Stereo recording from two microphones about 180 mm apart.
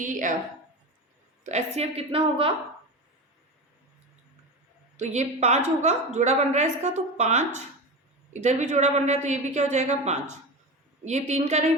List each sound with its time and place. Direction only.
0.0 s a woman's voice: 45° right (ahead or behind)
1.5 s a woman's voice: 40° right (ahead or behind)
4.9 s a woman's voice: 40° right (ahead or behind)